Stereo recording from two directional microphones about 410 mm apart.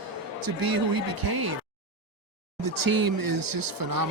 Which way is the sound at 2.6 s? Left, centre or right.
Right.